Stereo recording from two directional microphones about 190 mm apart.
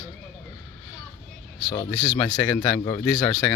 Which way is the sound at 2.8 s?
20° left (ahead or behind).